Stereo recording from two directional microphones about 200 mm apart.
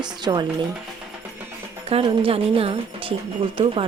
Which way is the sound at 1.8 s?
30° right (ahead or behind).